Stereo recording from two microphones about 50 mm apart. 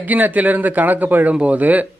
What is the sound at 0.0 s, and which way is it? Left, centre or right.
Speech, right.